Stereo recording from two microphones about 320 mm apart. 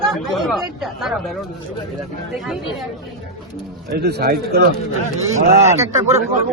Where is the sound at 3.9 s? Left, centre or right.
Right.